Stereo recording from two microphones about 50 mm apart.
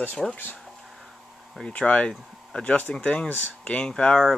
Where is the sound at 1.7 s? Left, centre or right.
Left.